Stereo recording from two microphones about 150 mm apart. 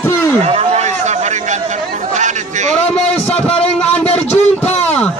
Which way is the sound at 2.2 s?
55° right (ahead or behind).